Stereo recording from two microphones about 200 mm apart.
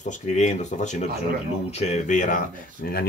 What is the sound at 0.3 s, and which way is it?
Speech, 35° left (ahead or behind).